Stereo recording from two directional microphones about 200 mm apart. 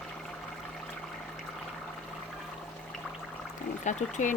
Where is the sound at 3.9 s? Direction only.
35° left (ahead or behind).